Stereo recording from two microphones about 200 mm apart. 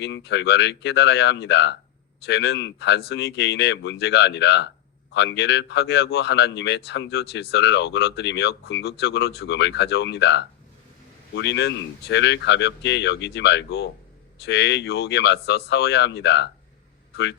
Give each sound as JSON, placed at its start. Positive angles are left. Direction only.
{"t": 0.0, "sound": "speech", "side_deg": 60}